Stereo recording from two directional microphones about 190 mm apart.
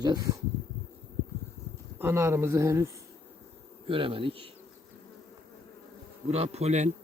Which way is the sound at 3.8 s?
30° right (ahead or behind).